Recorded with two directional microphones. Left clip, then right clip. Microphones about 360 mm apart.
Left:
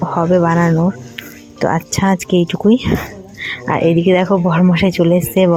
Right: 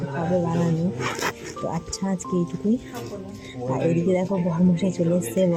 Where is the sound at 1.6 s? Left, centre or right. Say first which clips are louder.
Left 15 dB; centre.